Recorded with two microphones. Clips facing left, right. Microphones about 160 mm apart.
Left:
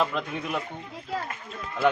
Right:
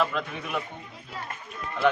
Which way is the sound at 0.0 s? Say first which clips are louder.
Left 1 dB; 15° left (ahead or behind).